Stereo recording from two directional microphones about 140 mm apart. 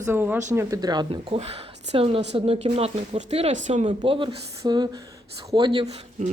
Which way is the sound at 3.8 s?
35° right (ahead or behind).